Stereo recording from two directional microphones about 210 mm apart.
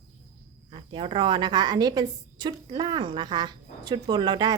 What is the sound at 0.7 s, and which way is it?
A woman's voice, 25° right (ahead or behind).